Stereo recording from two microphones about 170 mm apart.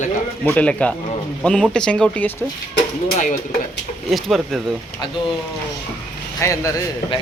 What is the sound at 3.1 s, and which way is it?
Speech, 50° left (ahead or behind).